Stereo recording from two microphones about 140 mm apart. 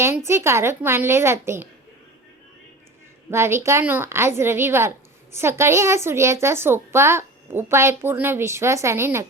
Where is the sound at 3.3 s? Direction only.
20° right (ahead or behind).